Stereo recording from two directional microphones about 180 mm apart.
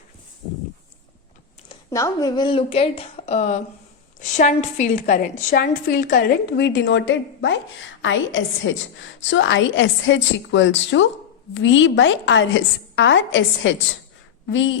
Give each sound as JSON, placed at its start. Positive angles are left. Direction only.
{"t": 1.9, "sound": "a woman's voice", "side_deg": 20}